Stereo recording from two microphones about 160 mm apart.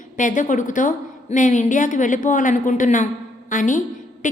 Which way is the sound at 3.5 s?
55° left (ahead or behind).